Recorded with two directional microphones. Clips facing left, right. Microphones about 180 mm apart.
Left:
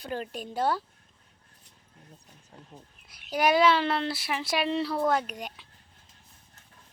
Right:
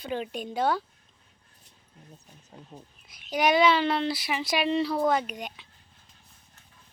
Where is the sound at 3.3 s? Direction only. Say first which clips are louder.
Even; 5° left (ahead or behind).